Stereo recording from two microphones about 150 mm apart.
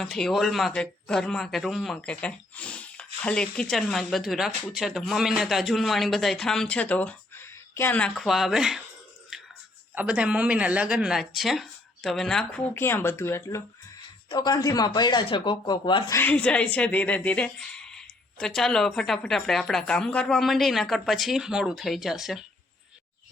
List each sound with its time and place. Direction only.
0.0 s speech: centre (ahead or behind)
9.3 s music: centre (ahead or behind)
9.9 s speech: 10° right (ahead or behind)
12.7 s speech: 15° left (ahead or behind)
14.3 s speech: 25° left (ahead or behind)
16.1 s speech: 10° left (ahead or behind)